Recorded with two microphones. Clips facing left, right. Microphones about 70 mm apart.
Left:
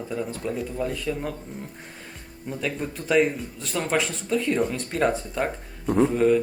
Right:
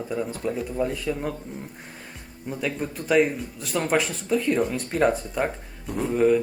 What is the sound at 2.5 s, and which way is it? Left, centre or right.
Speech, centre.